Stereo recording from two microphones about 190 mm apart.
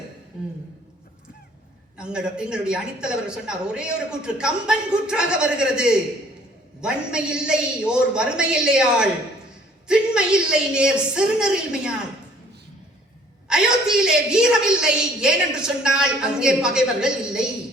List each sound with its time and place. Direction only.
2.0 s a woman's voice: 5° right (ahead or behind)
13.5 s a woman's voice: 5° right (ahead or behind)